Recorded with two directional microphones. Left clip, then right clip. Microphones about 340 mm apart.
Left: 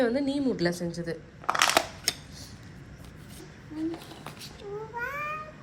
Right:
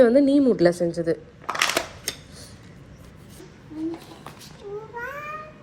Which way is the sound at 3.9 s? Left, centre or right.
Centre.